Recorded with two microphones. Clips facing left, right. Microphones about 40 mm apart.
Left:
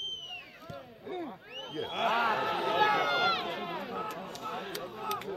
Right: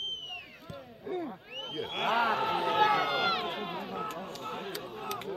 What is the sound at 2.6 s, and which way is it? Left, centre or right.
Run, centre.